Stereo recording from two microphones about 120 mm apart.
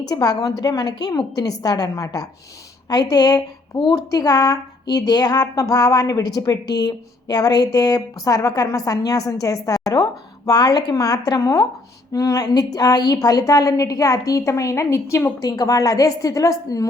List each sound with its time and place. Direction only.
0.1 s a woman's voice: 35° left (ahead or behind)